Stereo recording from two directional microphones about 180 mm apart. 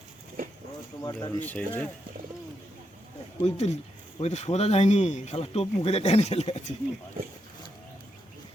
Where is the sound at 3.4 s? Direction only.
35° left (ahead or behind).